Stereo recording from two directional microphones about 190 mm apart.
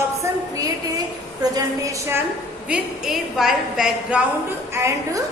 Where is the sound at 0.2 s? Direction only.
15° right (ahead or behind).